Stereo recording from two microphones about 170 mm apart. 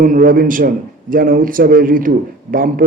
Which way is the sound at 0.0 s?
55° right (ahead or behind).